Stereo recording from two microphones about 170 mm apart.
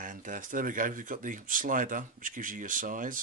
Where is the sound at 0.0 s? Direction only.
50° right (ahead or behind).